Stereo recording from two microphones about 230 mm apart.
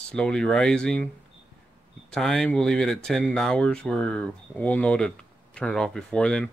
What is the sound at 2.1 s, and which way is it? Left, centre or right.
Speech, centre.